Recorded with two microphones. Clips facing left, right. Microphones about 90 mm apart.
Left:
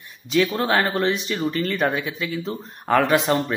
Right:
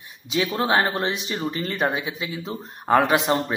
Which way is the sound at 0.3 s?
15° right (ahead or behind).